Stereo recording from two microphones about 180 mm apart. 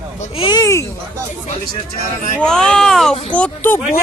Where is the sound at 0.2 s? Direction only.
30° left (ahead or behind).